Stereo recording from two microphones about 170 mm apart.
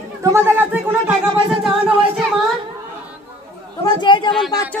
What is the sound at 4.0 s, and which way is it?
Speech, 30° left (ahead or behind).